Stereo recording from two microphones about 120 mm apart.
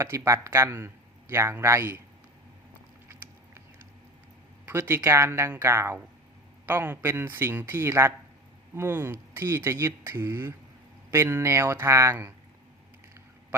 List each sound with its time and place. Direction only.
0.0 s speech: 25° right (ahead or behind)
4.6 s speech: 20° right (ahead or behind)